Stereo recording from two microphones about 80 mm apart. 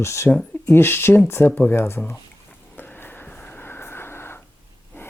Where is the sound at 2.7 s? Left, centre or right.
Left.